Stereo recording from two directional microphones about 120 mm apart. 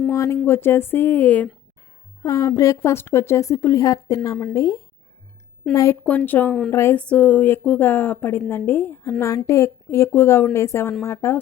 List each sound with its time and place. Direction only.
0.1 s a woman's voice: 25° left (ahead or behind)
2.2 s a woman's voice: 25° left (ahead or behind)
6.1 s a woman's voice: 15° left (ahead or behind)
7.1 s a woman's voice: 10° left (ahead or behind)